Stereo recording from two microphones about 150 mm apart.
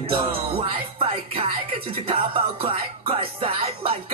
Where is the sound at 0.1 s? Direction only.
40° right (ahead or behind).